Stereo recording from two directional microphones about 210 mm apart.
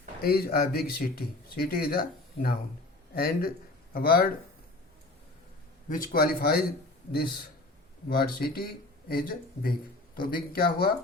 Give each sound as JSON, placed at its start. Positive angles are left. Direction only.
{"t": 0.2, "sound": "speech", "side_deg": 45}
{"t": 5.9, "sound": "speech", "side_deg": 40}
{"t": 8.1, "sound": "speech", "side_deg": 45}